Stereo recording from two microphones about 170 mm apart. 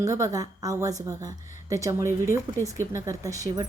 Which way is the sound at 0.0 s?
20° right (ahead or behind).